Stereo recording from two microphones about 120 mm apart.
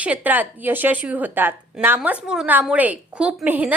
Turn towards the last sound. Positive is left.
turn(degrees=-15)  # may be behind; listen again after turning